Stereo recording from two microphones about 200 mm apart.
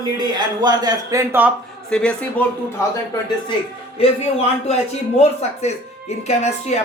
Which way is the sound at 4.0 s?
30° left (ahead or behind).